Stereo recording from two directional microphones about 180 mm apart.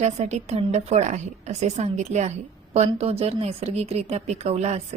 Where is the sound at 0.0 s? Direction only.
40° right (ahead or behind).